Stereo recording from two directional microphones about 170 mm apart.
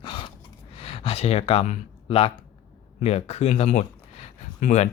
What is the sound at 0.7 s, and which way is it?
Speech, 35° left (ahead or behind).